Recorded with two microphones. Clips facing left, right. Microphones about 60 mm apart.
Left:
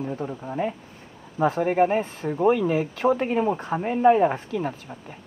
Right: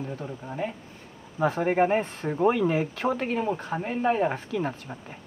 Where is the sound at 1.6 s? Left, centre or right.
Centre.